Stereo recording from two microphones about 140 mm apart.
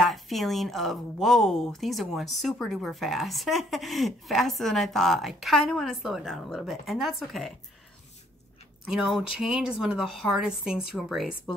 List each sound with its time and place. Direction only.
0.0 s speech: centre (ahead or behind)
8.8 s speech: 5° right (ahead or behind)